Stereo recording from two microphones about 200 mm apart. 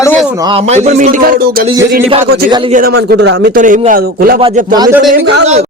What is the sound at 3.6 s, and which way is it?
A man's voice, 40° right (ahead or behind).